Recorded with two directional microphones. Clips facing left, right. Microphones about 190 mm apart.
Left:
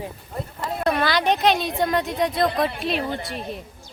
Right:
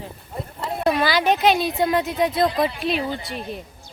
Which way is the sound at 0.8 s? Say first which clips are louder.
Right 2 dB; 5° right (ahead or behind).